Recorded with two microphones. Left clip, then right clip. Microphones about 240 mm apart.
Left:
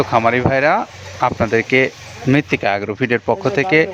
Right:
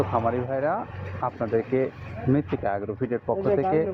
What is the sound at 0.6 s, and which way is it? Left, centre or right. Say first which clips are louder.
Speech: left 11 dB; left.